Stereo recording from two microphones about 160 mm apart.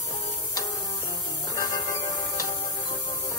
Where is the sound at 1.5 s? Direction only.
20° left (ahead or behind).